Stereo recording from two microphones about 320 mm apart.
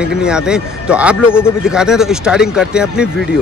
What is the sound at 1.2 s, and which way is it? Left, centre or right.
Speech, centre.